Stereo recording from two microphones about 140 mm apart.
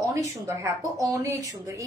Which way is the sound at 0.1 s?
20° right (ahead or behind).